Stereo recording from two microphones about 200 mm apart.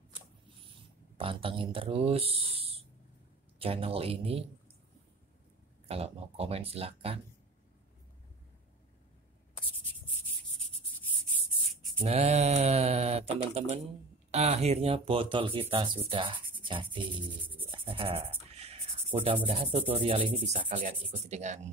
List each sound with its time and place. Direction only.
1.1 s speech: 25° right (ahead or behind)
5.9 s speech: 30° right (ahead or behind)
12.0 s speech: 30° right (ahead or behind)
16.6 s a sound: 25° right (ahead or behind)
17.6 s speech: 25° right (ahead or behind)
20.5 s speech: 40° right (ahead or behind)